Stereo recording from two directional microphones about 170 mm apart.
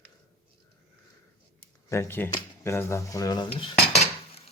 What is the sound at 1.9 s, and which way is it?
Speech, 15° left (ahead or behind).